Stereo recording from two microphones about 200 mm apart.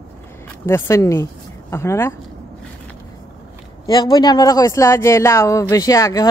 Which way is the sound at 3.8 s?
20° left (ahead or behind).